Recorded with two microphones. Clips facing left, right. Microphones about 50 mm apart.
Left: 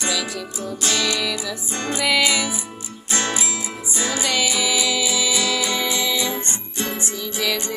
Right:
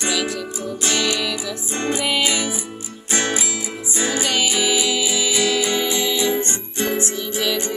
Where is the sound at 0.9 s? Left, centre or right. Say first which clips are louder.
Right 1 dB; centre.